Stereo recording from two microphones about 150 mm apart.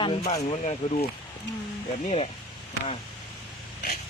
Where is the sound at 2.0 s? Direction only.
40° left (ahead or behind).